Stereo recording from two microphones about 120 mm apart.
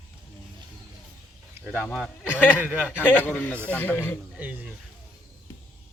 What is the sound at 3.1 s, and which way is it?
Speech, 15° left (ahead or behind).